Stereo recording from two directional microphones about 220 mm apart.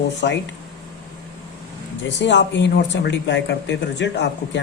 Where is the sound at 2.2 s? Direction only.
55° left (ahead or behind).